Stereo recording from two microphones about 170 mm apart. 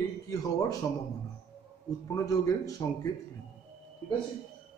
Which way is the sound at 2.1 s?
20° left (ahead or behind).